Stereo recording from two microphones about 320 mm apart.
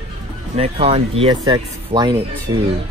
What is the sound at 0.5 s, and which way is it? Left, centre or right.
Speech, centre.